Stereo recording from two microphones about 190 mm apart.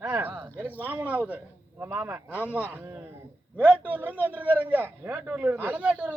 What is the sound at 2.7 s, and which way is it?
A man's voice, 10° right (ahead or behind).